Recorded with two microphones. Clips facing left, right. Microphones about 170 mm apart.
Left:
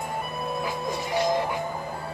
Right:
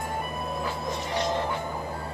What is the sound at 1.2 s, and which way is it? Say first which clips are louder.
Music: left 4 dB; 10° left (ahead or behind).